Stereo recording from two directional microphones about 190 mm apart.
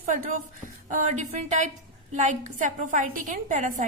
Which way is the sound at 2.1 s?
40° right (ahead or behind).